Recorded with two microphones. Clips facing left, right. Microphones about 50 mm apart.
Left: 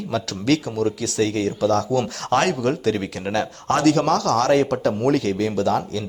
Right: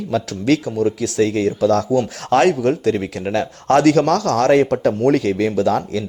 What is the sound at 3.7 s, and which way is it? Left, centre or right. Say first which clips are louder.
Speech: right 4 dB; right.